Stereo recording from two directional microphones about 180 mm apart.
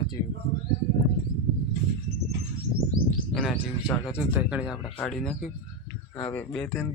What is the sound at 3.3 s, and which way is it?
Speech, centre (ahead or behind).